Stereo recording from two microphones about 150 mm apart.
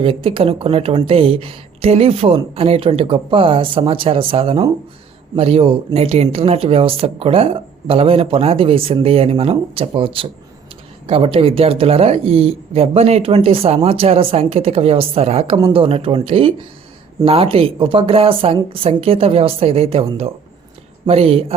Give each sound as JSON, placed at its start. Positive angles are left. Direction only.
{"t": 0.0, "sound": "speech", "side_deg": -35}